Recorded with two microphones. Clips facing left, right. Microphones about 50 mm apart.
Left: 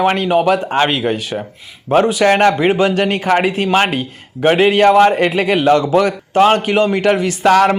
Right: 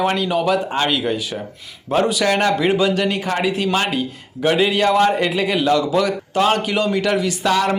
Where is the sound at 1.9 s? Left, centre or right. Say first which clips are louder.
Left 5 dB; left.